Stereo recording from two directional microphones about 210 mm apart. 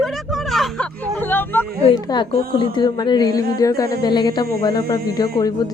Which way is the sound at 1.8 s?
20° left (ahead or behind).